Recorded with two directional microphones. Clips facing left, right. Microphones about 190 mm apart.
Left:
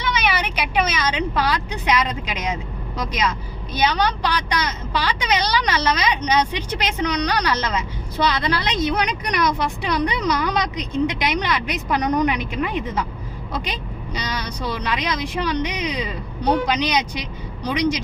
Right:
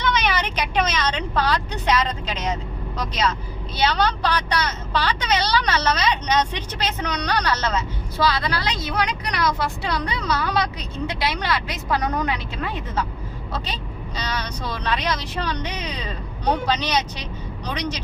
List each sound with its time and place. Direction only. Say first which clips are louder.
0.0 s vehicle: even; 10° left (ahead or behind)
3.1 s a woman's voice: right 1 dB; 10° left (ahead or behind)
14.2 s a woman's voice: left 1 dB; 10° left (ahead or behind)